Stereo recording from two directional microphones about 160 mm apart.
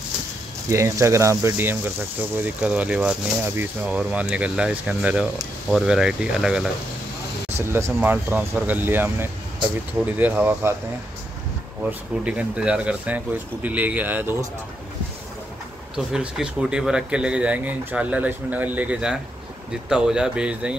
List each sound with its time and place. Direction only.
0.7 s speech: 20° right (ahead or behind); by 6.7 s 5° right (ahead or behind)
7.7 s speech: 15° right (ahead or behind)
11.8 s speech: 5° right (ahead or behind)
16.1 s speech: 5° right (ahead or behind)